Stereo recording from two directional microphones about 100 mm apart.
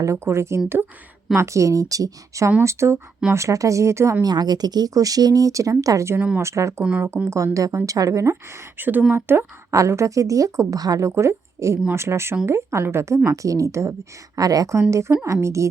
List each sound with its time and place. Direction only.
0.0 s a woman's voice: 30° right (ahead or behind)
4.2 s a woman's voice: 45° right (ahead or behind)
6.1 s speech: 15° right (ahead or behind)
6.4 s a woman's voice: 30° right (ahead or behind)